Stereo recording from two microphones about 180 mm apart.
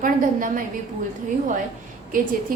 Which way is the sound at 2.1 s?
50° right (ahead or behind).